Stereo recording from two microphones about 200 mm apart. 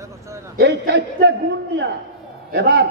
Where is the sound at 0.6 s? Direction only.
55° right (ahead or behind).